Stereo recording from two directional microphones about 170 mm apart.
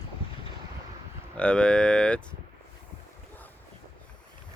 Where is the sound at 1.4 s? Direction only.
5° left (ahead or behind).